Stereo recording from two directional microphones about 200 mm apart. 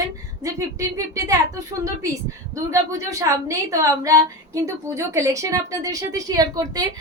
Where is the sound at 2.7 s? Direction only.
15° right (ahead or behind).